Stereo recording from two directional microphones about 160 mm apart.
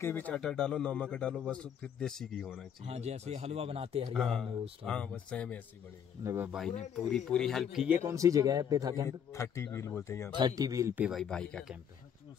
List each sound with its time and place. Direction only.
0.0 s speech: 10° left (ahead or behind)
2.8 s speech: 45° right (ahead or behind)
4.1 s speech: 5° left (ahead or behind)
6.2 s speech: 15° right (ahead or behind)
7.1 s speech: 5° left (ahead or behind)
8.0 s speech: 20° right (ahead or behind)
9.3 s speech: 15° left (ahead or behind)
10.3 s speech: 25° right (ahead or behind)
11.1 s speech: centre (ahead or behind)